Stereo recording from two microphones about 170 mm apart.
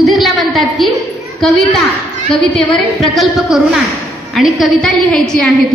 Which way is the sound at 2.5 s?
Centre (ahead or behind).